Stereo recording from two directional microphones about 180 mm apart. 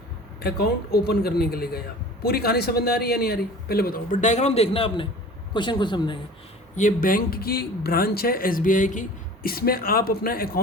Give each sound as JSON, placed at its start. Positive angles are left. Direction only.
{"t": 0.4, "sound": "speech", "side_deg": 60}
{"t": 6.7, "sound": "speech", "side_deg": 45}